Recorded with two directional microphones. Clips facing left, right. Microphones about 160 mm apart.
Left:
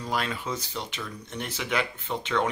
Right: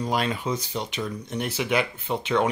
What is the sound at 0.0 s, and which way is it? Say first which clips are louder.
Speech: right 4 dB; 20° right (ahead or behind).